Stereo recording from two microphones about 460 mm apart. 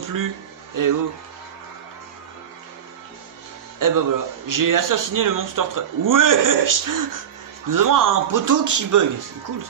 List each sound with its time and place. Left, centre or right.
0.0 s speech: right
3.8 s speech: right